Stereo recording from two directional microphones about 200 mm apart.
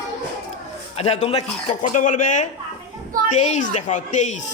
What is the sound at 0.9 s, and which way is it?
Speech, 30° left (ahead or behind).